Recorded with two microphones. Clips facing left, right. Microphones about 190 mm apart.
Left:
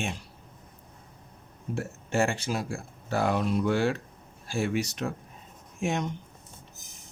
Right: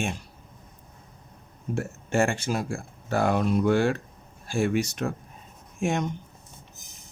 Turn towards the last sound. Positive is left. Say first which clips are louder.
# right 3 dB
turn(degrees=-50)  # may be behind; listen again after turning